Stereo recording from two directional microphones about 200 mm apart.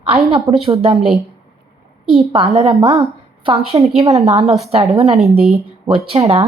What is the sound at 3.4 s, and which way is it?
A woman's voice, 30° right (ahead or behind).